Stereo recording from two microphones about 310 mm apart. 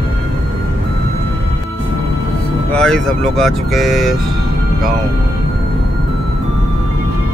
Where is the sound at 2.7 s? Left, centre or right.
Centre.